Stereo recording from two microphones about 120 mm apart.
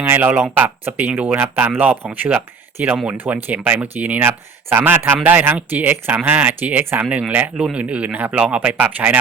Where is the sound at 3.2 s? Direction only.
15° right (ahead or behind).